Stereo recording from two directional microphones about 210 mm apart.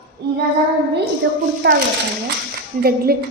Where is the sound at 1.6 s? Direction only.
55° right (ahead or behind).